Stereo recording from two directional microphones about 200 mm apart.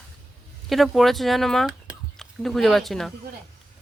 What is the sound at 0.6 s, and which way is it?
Speech, centre (ahead or behind).